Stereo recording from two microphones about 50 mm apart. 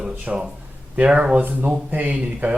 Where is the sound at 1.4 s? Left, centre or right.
Right.